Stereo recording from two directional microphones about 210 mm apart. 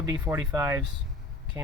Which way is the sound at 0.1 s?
15° right (ahead or behind).